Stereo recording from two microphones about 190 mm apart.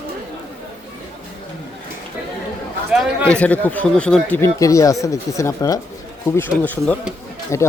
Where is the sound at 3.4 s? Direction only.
10° left (ahead or behind).